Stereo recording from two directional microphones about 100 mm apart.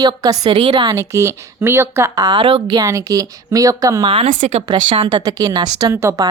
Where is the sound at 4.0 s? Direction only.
65° right (ahead or behind).